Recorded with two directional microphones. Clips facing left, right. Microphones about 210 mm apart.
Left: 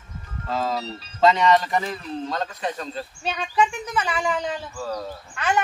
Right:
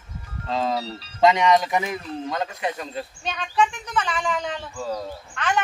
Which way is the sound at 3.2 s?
10° left (ahead or behind).